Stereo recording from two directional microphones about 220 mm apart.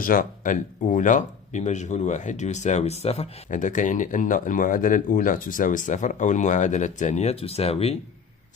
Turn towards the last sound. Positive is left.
turn(degrees=25)  # may be behind; listen again after turning